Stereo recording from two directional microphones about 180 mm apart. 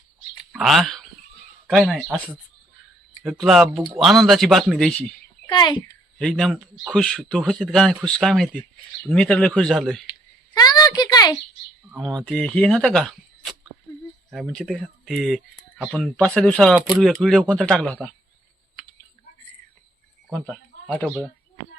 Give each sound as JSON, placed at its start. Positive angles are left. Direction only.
{"t": 0.5, "sound": "a man's voice", "side_deg": 0}
{"t": 5.5, "sound": "speech", "side_deg": 25}
{"t": 6.1, "sound": "a man's voice", "side_deg": 5}
{"t": 10.1, "sound": "a sound", "side_deg": 20}
{"t": 12.0, "sound": "a man's voice", "side_deg": 5}
{"t": 20.3, "sound": "speech", "side_deg": 0}